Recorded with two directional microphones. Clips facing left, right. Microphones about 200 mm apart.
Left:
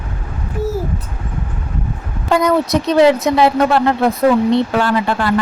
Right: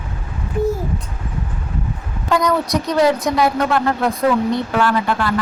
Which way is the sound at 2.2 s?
25° left (ahead or behind).